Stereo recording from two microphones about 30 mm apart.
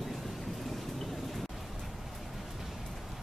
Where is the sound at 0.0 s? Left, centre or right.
Centre.